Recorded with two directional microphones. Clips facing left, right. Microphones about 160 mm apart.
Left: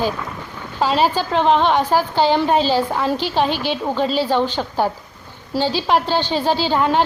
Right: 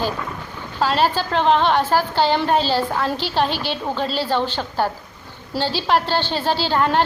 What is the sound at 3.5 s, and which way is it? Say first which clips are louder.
Speech: left 3 dB; 50° left (ahead or behind).